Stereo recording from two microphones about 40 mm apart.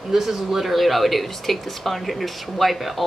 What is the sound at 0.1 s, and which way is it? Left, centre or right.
Speech, centre.